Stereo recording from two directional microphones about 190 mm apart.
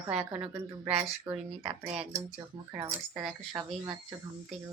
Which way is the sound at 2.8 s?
5° right (ahead or behind).